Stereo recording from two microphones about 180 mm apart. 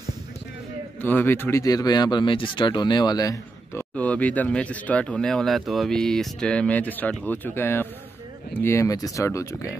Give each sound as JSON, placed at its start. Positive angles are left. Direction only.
{"t": 1.0, "sound": "speech", "side_deg": 10}
{"t": 3.9, "sound": "speech", "side_deg": 10}